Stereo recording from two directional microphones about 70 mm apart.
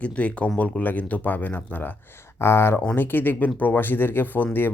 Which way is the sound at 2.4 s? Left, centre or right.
Left.